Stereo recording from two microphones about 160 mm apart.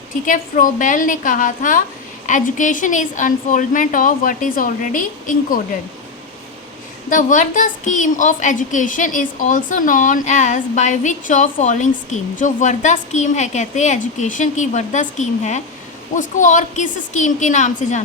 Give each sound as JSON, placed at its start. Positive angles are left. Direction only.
{"t": 0.1, "sound": "a woman's voice", "side_deg": 55}
{"t": 7.1, "sound": "a woman's voice", "side_deg": 55}